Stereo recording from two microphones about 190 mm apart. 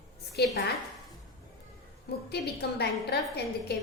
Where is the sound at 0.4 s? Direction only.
60° left (ahead or behind).